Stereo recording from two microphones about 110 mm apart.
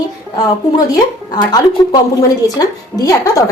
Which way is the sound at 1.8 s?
30° left (ahead or behind).